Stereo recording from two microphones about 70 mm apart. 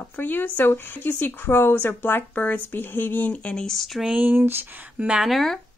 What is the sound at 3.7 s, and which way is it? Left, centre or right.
Speech, centre.